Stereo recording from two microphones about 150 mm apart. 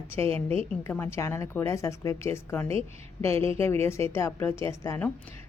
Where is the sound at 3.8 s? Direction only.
20° left (ahead or behind).